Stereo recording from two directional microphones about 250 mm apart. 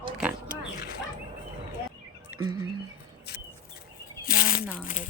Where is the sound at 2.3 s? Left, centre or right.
Centre.